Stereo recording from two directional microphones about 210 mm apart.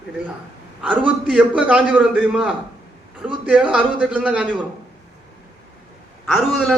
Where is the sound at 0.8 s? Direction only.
5° right (ahead or behind).